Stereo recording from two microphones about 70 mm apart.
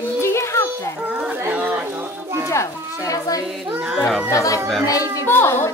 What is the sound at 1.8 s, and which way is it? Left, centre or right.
Speech, right.